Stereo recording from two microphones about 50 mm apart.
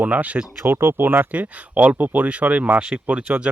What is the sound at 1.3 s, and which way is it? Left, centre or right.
Speech, right.